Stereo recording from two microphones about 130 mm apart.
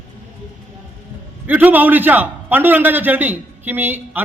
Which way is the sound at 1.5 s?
15° right (ahead or behind).